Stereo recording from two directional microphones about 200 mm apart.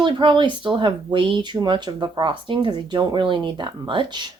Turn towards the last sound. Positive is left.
turn(degrees=-20)  # may be behind; listen again after turning